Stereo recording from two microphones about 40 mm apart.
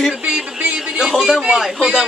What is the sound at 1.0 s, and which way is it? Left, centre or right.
Speech, centre.